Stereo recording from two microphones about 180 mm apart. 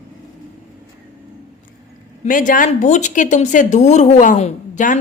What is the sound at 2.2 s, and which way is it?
A woman's voice, 45° left (ahead or behind).